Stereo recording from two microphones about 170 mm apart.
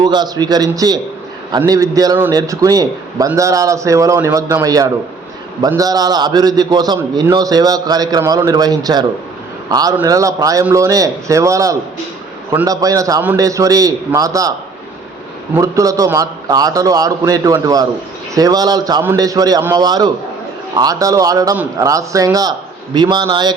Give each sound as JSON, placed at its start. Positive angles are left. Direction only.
{"t": 0.0, "sound": "a man's voice", "side_deg": -25}
{"t": 15.5, "sound": "a man's voice", "side_deg": -20}